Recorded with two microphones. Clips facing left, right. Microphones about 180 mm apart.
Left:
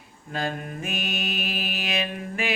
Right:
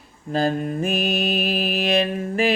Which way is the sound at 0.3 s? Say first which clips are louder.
Right 9 dB; 35° right (ahead or behind).